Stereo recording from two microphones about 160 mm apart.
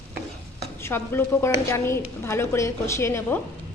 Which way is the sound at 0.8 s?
15° left (ahead or behind).